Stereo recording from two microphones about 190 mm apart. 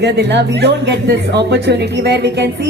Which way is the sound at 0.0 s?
65° right (ahead or behind).